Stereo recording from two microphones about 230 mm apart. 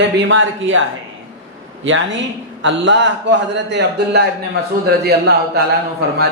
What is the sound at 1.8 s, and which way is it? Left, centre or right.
Speech, right.